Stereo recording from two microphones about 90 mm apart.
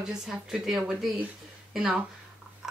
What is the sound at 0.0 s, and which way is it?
A woman's voice, 5° right (ahead or behind).